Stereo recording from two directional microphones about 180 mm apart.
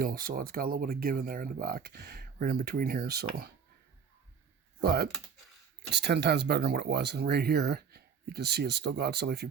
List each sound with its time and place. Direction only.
0.0 s speech: 55° right (ahead or behind)
4.8 s speech: 60° right (ahead or behind)